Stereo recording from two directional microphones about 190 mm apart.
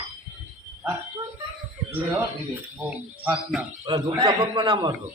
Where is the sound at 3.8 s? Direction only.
20° right (ahead or behind).